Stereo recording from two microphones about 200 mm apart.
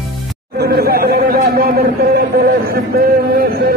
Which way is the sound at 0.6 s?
50° right (ahead or behind).